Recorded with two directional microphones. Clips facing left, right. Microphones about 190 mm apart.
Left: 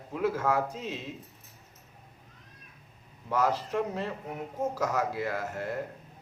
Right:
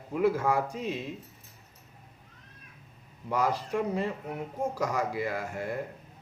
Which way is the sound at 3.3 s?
15° right (ahead or behind).